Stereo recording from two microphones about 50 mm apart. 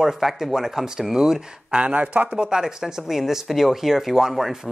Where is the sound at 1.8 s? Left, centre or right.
Right.